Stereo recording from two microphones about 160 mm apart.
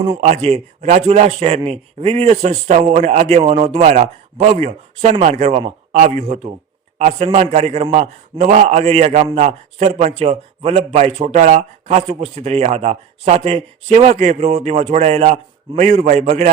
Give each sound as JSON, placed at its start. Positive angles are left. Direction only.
{"t": 0.2, "sound": "a man's voice", "side_deg": -45}